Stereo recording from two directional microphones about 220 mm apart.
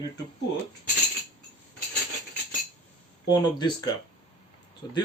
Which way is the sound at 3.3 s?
20° left (ahead or behind).